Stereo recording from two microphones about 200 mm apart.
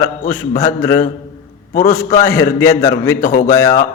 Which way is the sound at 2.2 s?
15° left (ahead or behind).